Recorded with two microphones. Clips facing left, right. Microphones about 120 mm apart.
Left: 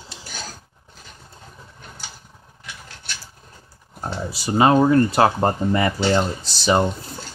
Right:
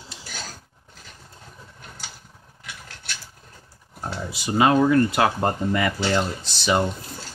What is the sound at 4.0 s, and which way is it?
Speech, 30° left (ahead or behind).